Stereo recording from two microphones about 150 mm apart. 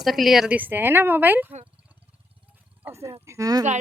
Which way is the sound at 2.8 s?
20° right (ahead or behind).